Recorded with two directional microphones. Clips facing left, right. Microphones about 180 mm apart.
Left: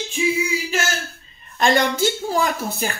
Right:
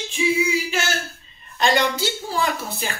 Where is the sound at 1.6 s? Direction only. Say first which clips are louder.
Left 2 dB; 45° left (ahead or behind).